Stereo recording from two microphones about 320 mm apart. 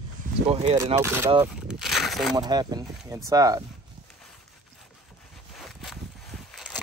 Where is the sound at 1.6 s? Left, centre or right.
Centre.